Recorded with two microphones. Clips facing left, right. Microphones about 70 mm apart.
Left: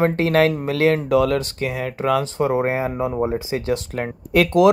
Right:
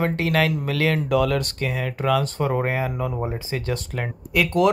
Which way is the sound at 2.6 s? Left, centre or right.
Left.